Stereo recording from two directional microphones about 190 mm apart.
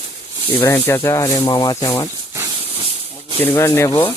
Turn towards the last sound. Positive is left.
turn(degrees=15)  # may be behind; listen again after turning